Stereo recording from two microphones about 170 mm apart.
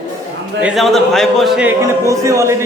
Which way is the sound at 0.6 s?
Centre (ahead or behind).